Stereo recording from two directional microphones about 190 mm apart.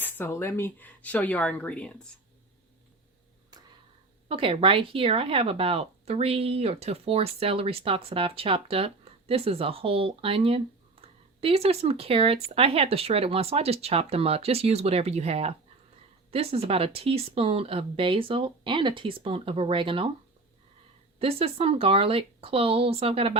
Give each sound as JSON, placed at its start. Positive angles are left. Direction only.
{"t": 0.0, "sound": "speech", "side_deg": 10}
{"t": 4.3, "sound": "speech", "side_deg": -30}
{"t": 21.2, "sound": "speech", "side_deg": -30}